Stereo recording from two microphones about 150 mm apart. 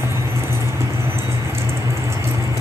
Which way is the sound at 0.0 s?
20° right (ahead or behind).